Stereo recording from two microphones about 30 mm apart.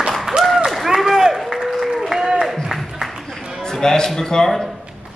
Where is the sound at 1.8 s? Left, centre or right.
Centre.